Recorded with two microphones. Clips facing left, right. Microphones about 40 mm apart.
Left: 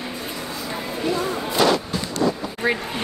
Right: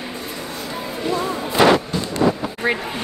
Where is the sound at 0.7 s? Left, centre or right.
Centre.